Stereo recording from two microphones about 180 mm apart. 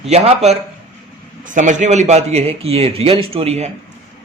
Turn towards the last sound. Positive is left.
turn(degrees=-35)  # may be behind; listen again after turning